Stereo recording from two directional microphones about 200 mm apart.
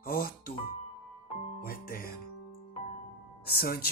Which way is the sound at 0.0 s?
45° left (ahead or behind).